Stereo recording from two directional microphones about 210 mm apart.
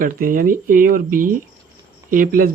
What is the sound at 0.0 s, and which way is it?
Speech, 40° right (ahead or behind).